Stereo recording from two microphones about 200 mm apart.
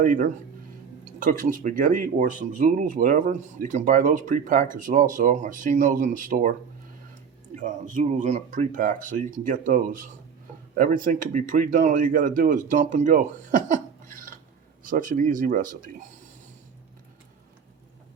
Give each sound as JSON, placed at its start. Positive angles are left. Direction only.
{"t": 0.0, "sound": "speech", "side_deg": -40}
{"t": 7.6, "sound": "speech", "side_deg": -40}